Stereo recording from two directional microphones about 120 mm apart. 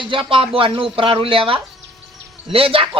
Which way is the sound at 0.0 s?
45° right (ahead or behind).